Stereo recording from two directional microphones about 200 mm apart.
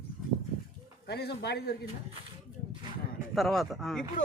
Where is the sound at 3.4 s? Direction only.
Centre (ahead or behind).